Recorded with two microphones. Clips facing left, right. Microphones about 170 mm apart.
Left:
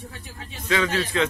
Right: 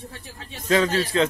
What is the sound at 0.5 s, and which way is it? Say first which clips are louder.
Speech: right 3 dB; 40° right (ahead or behind).